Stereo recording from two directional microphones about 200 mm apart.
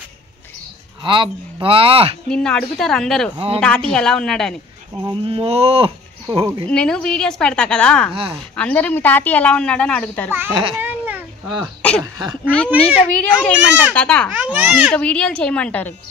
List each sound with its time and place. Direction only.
1.0 s speech: 25° right (ahead or behind)
2.2 s a woman's voice: 5° left (ahead or behind)
3.3 s speech: 30° right (ahead or behind)
3.6 s a woman's voice: 5° left (ahead or behind)
5.0 s speech: 25° right (ahead or behind)
6.7 s a woman's voice: 5° left (ahead or behind)
8.1 s speech: 25° right (ahead or behind)
8.5 s a woman's voice: 5° left (ahead or behind)
10.8 s a sound: 10° right (ahead or behind)
12.6 s a child's voice: 30° left (ahead or behind)
13.0 s a woman's voice: 5° left (ahead or behind)
13.3 s speech: 5° right (ahead or behind)
13.9 s a woman's voice: 5° left (ahead or behind)
14.3 s a woman's voice: 10° right (ahead or behind)